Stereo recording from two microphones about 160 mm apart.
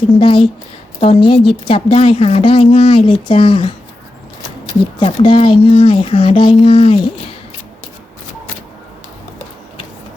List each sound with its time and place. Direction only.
0.2 s a woman's voice: 35° left (ahead or behind)
4.9 s a woman's voice: 30° left (ahead or behind)